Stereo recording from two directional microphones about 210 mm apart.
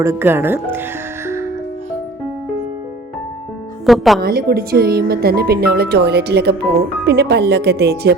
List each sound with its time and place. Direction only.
0.0 s speech: 10° right (ahead or behind)
3.8 s speech: centre (ahead or behind)
4.2 s speech: 45° right (ahead or behind)